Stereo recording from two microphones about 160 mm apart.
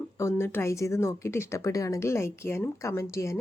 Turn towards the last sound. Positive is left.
turn(degrees=20)  # may be behind; listen again after turning